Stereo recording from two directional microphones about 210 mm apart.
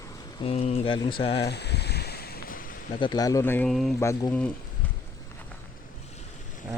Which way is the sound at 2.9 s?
20° left (ahead or behind).